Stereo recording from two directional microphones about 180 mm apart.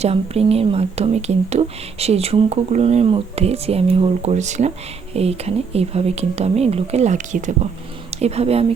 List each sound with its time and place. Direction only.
0.0 s speech: 35° right (ahead or behind)